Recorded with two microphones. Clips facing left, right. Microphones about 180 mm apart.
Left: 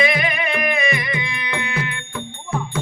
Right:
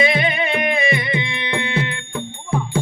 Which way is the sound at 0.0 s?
30° right (ahead or behind).